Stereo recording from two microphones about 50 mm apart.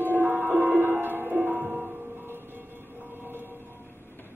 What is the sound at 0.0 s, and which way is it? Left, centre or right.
Music, right.